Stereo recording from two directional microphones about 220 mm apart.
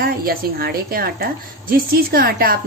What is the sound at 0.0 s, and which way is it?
A woman's voice, 40° right (ahead or behind).